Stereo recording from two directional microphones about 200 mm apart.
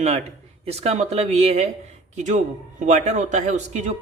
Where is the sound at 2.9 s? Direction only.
35° right (ahead or behind).